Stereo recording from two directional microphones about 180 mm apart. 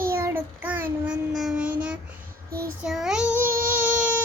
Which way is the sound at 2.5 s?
55° right (ahead or behind).